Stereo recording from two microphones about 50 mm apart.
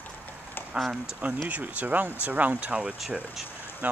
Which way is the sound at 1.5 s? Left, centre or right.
Right.